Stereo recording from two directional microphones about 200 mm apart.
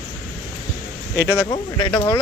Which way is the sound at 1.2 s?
10° left (ahead or behind).